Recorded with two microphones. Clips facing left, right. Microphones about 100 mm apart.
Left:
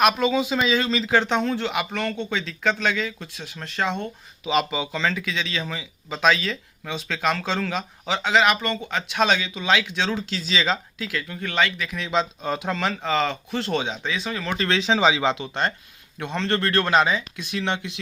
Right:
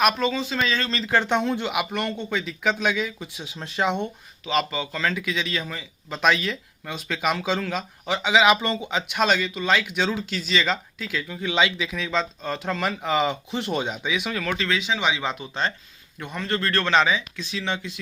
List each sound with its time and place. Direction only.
0.0 s speech: 5° left (ahead or behind); by 4.1 s 15° right (ahead or behind)
4.4 s speech: 5° left (ahead or behind); by 9.1 s 15° right (ahead or behind)
9.1 s speech: centre (ahead or behind)
11.9 s speech: centre (ahead or behind)
14.7 s speech: 35° left (ahead or behind)
15.2 s speech: 90° left
16.7 s speech: 10° left (ahead or behind)
17.1 s speech: 50° left (ahead or behind)